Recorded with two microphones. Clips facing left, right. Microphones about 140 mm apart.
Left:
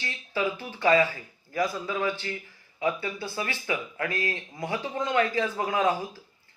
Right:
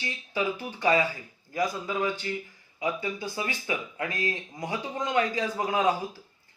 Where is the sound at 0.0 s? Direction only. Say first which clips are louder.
Left 1 dB; 15° right (ahead or behind).